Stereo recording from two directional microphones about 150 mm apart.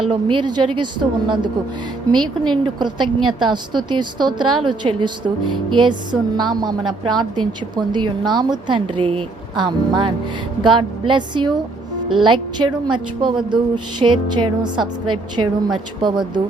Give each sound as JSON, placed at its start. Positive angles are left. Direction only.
{"t": 0.1, "sound": "a woman's voice", "side_deg": -35}
{"t": 16.0, "sound": "a woman's voice", "side_deg": -30}